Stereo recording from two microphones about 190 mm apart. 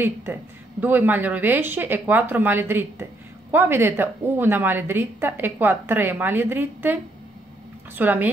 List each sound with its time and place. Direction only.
0.0 s a woman's voice: 10° right (ahead or behind)